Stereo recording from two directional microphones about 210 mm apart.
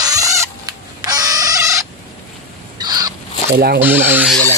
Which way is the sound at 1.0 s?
20° right (ahead or behind).